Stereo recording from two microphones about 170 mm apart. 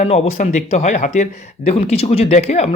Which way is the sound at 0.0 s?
40° left (ahead or behind).